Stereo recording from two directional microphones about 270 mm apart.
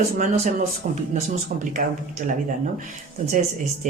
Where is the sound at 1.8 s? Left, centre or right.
Right.